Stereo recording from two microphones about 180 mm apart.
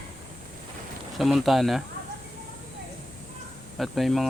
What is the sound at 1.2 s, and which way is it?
Speech, centre (ahead or behind).